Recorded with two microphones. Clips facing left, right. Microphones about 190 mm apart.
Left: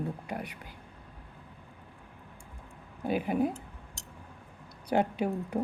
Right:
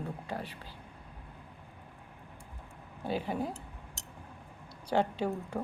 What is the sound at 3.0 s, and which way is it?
Speech, 15° left (ahead or behind).